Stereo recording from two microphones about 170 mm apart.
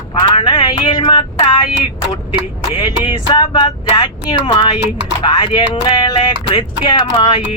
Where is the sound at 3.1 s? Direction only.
25° left (ahead or behind).